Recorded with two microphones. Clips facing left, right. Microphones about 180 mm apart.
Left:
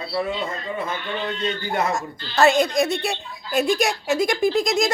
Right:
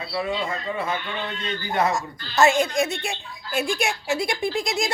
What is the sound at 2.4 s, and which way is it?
Speech, 35° left (ahead or behind).